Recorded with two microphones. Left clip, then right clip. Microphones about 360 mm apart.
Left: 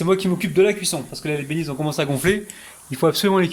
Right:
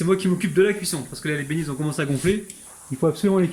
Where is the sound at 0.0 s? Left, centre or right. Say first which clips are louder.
Left 2 dB; centre.